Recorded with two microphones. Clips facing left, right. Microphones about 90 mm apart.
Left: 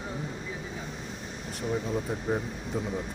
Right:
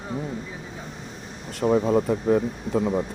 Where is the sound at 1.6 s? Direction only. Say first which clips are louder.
Right 11 dB; 80° right.